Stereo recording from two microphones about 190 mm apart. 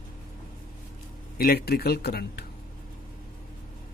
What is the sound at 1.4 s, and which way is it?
Speech, 55° left (ahead or behind).